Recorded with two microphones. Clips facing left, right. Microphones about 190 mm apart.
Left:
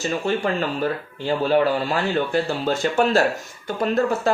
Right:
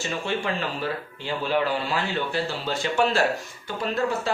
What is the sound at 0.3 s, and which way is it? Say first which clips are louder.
Speech: left 5 dB; 45° left (ahead or behind).